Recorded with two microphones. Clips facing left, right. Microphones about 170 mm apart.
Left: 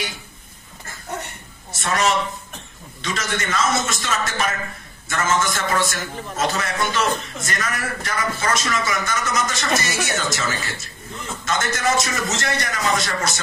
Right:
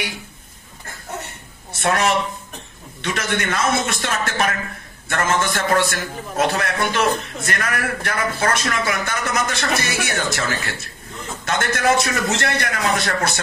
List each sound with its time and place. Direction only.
1.7 s a woman's voice: 60° right (ahead or behind)